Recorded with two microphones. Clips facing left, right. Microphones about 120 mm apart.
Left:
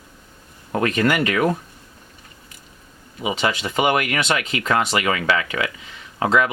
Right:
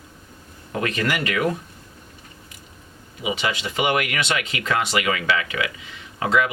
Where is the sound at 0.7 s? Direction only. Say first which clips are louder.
Left 5 dB; 40° left (ahead or behind).